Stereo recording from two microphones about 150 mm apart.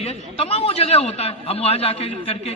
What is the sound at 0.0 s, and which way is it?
A man's voice, 40° left (ahead or behind).